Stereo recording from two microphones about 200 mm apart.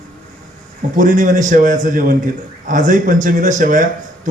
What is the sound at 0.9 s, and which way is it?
A man's voice, 40° right (ahead or behind).